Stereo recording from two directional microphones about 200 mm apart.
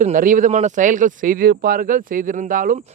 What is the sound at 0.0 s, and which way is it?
Speech, 40° right (ahead or behind).